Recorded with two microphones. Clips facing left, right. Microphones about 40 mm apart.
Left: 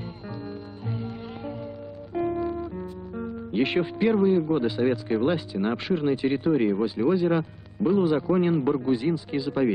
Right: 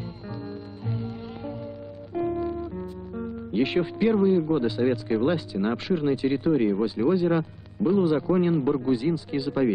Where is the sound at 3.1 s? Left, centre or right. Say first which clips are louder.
Even; centre.